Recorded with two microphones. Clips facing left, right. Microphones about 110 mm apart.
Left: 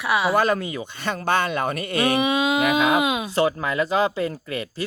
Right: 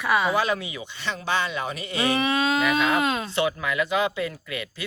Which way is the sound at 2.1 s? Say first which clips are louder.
Left 1 dB; 15° left (ahead or behind).